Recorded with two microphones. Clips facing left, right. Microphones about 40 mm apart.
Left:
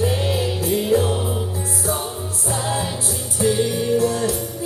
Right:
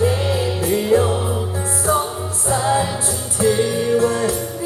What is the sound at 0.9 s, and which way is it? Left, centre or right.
Music, right.